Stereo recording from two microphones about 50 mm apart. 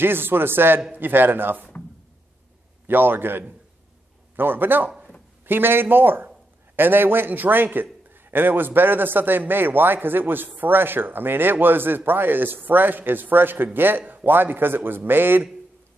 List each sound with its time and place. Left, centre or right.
0.0 s a man's voice: right
2.9 s a man's voice: right